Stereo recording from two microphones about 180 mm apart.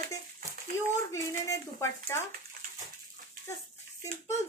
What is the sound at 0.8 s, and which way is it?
Speech, 15° left (ahead or behind).